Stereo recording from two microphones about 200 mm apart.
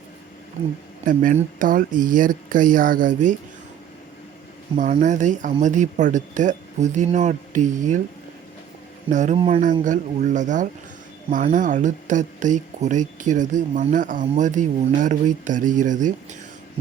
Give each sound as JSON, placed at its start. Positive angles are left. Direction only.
{"t": 1.0, "sound": "speech", "side_deg": -40}
{"t": 4.8, "sound": "speech", "side_deg": -40}
{"t": 9.0, "sound": "speech", "side_deg": -35}